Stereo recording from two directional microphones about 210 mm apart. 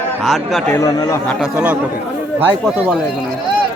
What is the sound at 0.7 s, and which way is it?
Speech, 15° left (ahead or behind).